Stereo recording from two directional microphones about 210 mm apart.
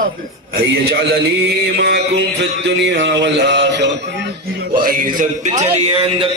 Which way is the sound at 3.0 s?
55° right (ahead or behind).